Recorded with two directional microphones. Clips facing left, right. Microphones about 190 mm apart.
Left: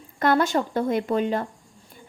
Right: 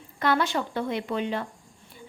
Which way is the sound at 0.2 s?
45° left (ahead or behind).